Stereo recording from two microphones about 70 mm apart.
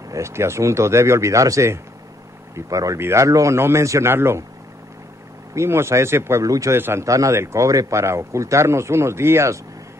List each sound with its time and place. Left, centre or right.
0.1 s speech: right
5.5 s speech: right
6.4 s a man's voice: right
6.7 s speech: right